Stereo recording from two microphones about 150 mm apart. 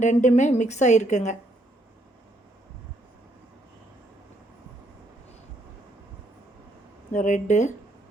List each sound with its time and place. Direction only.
0.0 s a woman's voice: 55° left (ahead or behind)
7.1 s speech: 55° left (ahead or behind)